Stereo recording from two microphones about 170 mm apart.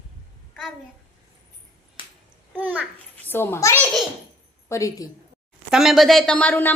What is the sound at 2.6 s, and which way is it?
Speech, 10° right (ahead or behind).